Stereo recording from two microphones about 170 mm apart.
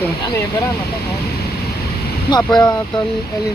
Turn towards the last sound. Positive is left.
turn(degrees=25)  # may be behind; listen again after turning